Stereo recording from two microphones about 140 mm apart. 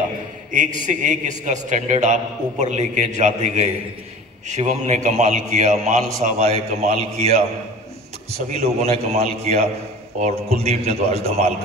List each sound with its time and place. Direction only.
0.5 s a man's voice: 65° right (ahead or behind)
8.5 s a man's voice: 50° right (ahead or behind)